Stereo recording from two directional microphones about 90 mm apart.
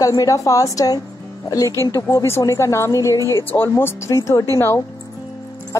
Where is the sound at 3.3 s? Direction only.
25° left (ahead or behind).